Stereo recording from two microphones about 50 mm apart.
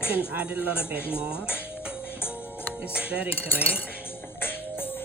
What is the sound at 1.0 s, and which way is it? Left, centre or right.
Speech, left.